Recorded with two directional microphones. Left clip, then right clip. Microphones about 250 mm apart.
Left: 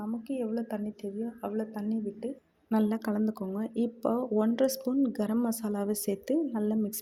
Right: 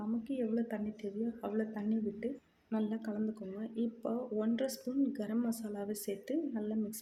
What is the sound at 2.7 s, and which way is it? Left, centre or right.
Speech, left.